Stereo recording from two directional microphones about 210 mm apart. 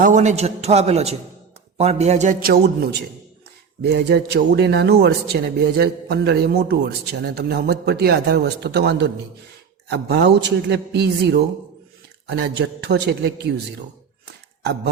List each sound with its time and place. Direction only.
0.0 s a man's voice: 35° right (ahead or behind); by 13.5 s 55° right (ahead or behind)